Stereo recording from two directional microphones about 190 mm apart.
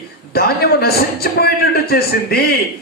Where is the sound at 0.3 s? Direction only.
55° left (ahead or behind).